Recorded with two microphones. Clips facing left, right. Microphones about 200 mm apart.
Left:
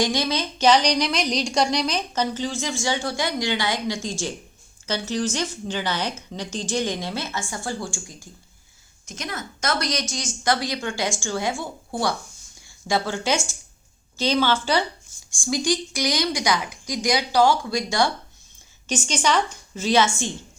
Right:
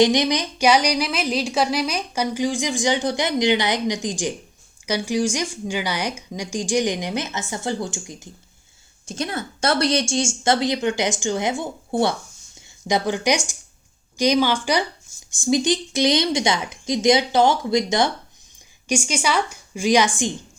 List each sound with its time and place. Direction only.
0.0 s speech: 20° right (ahead or behind)
9.0 s a woman's voice: 30° right (ahead or behind)
18.9 s speech: 10° right (ahead or behind)